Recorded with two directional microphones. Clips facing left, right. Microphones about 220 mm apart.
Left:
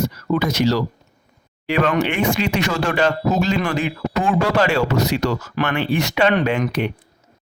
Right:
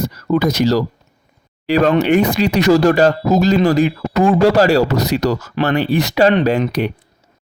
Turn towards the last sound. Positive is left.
turn(degrees=-40)  # may be behind; listen again after turning